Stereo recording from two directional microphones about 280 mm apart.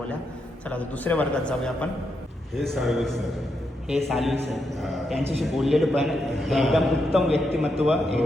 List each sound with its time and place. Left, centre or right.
0.7 s a man's voice: centre